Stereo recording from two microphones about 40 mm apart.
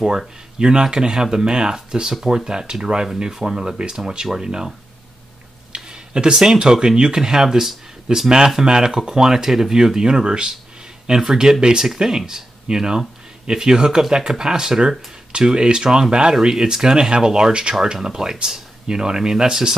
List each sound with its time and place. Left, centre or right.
0.6 s speech: right
5.9 s speech: right